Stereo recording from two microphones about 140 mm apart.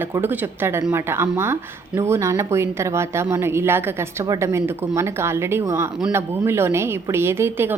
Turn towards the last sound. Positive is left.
turn(degrees=-15)  # may be behind; listen again after turning